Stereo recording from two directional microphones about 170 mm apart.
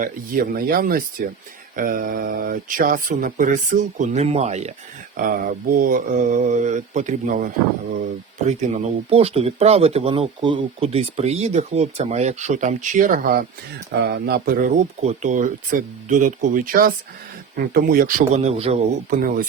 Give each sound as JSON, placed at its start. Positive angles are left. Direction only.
{"t": 0.0, "sound": "speech", "side_deg": -55}
{"t": 5.1, "sound": "speech", "side_deg": -55}
{"t": 8.4, "sound": "speech", "side_deg": -40}
{"t": 13.9, "sound": "speech", "side_deg": -70}